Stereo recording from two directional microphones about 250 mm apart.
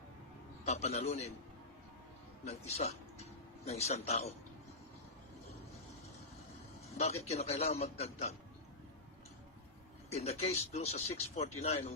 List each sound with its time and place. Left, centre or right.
0.6 s speech: left
2.5 s speech: left
6.9 s speech: left
10.1 s speech: left